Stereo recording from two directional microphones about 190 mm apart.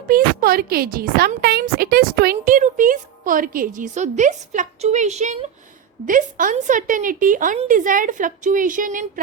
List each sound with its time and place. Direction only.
0.1 s a woman's voice: 50° right (ahead or behind)